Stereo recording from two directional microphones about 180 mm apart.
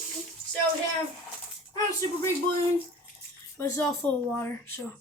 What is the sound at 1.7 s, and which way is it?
Speech, 15° left (ahead or behind).